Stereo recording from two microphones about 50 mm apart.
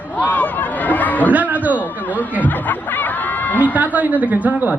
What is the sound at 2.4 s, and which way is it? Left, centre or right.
Snicker, left.